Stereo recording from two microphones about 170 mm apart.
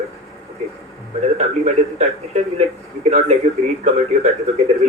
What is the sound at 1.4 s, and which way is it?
Speech, 40° right (ahead or behind).